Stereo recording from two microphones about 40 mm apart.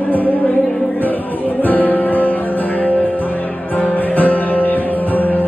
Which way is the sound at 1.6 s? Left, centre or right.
Left.